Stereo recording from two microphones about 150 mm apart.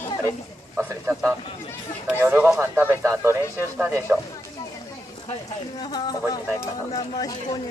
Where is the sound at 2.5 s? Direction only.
15° right (ahead or behind).